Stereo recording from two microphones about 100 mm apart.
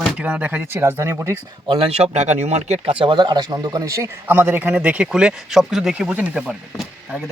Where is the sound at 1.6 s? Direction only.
65° right (ahead or behind).